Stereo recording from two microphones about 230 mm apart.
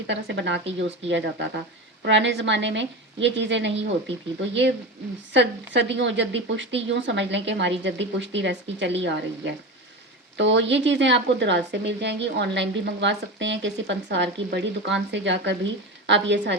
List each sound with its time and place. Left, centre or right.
0.1 s speech: right
5.3 s speech: right